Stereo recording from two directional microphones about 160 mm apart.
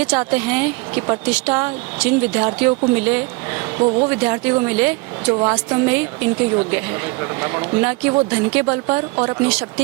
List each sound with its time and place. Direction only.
0.0 s a woman's voice: 10° right (ahead or behind)